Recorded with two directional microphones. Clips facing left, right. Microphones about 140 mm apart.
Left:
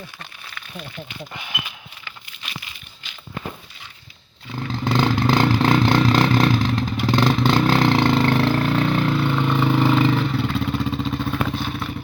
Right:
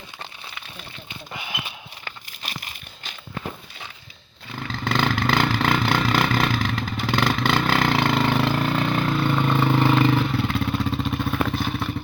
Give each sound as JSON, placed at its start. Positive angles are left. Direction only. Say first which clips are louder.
{"t": 1.6, "sound": "a sound", "louder": "right 2 dB", "side_deg": -40}
{"t": 4.7, "sound": "vehicle", "louder": "left 3 dB", "side_deg": 15}
{"t": 5.8, "sound": "vehicle", "louder": "left 4 dB", "side_deg": -5}